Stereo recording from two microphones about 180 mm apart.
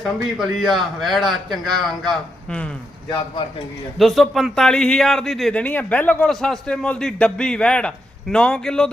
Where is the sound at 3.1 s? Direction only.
25° left (ahead or behind).